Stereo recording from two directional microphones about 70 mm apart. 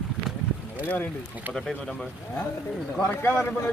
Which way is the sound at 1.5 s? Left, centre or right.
Right.